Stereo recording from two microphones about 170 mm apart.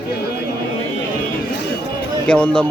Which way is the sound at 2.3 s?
5° left (ahead or behind).